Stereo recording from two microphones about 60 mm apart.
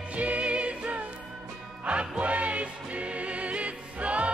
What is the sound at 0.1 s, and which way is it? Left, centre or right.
Music, right.